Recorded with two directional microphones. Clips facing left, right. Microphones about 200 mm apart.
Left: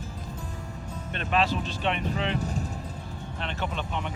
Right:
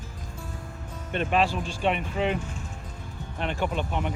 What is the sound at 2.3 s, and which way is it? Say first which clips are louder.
Vehicle: left 4 dB; 40° left (ahead or behind).